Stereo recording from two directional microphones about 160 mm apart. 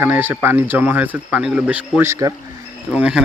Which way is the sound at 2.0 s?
20° right (ahead or behind).